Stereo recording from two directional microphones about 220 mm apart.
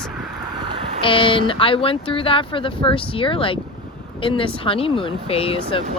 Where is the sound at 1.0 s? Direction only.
25° left (ahead or behind).